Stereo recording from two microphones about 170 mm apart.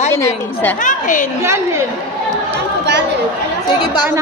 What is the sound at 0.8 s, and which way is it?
Speech, 50° left (ahead or behind).